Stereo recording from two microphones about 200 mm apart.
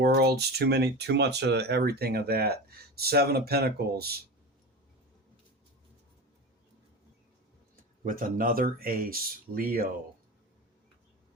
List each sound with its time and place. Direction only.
0.0 s speech: 55° right (ahead or behind)
8.0 s speech: 45° right (ahead or behind)